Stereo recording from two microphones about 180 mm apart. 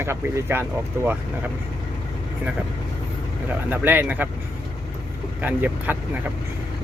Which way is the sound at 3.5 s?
10° right (ahead or behind).